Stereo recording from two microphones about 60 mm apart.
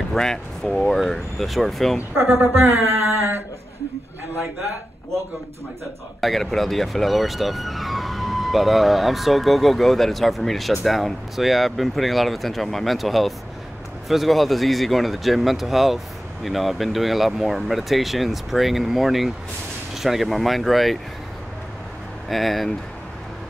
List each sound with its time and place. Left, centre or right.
0.1 s speech: centre
2.1 s speech: right
6.2 s speech: centre
22.3 s speech: centre